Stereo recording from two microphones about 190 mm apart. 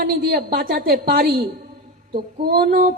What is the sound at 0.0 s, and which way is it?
A woman's voice, 55° right (ahead or behind).